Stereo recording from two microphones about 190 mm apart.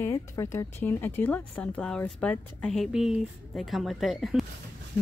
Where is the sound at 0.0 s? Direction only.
15° left (ahead or behind).